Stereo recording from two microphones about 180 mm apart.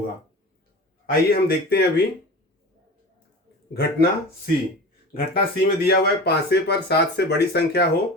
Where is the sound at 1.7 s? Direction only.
65° left (ahead or behind).